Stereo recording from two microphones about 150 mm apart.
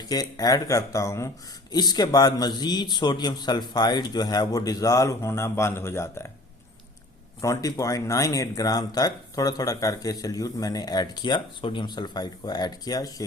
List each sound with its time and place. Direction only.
0.0 s speech: 25° left (ahead or behind)
7.4 s speech: 20° left (ahead or behind)